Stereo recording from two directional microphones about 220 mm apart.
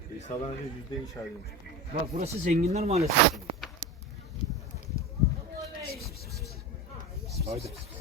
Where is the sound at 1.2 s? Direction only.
10° left (ahead or behind).